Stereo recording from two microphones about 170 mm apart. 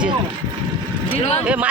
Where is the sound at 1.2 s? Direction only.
40° left (ahead or behind).